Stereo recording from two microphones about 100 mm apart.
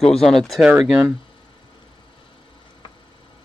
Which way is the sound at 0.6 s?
10° right (ahead or behind).